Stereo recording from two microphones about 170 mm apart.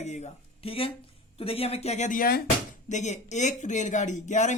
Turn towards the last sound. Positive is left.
turn(degrees=45)  # may be behind; listen again after turning